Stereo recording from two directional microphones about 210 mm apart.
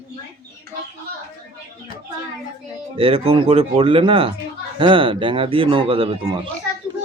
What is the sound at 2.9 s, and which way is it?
Speech, 25° right (ahead or behind).